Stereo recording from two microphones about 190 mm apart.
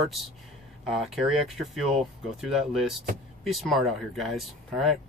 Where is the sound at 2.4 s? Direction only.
Centre (ahead or behind).